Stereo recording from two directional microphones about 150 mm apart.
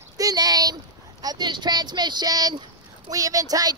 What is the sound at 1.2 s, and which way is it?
Speech, 30° right (ahead or behind).